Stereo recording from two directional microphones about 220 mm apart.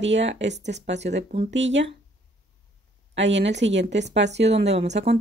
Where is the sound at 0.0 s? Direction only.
55° right (ahead or behind).